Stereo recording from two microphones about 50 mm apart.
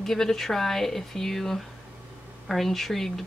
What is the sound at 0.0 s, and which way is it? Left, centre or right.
A woman's voice, centre.